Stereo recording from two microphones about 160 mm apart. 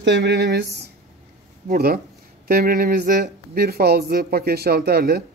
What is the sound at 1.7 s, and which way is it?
Speech, 70° right (ahead or behind).